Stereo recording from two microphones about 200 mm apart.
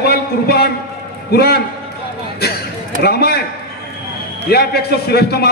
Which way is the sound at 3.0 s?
50° left (ahead or behind).